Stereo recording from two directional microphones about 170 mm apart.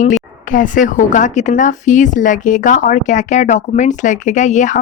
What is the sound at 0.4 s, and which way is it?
A woman's voice, 50° left (ahead or behind).